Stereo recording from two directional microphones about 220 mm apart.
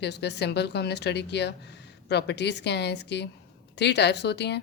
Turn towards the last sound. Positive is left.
turn(degrees=50)  # may be behind; listen again after turning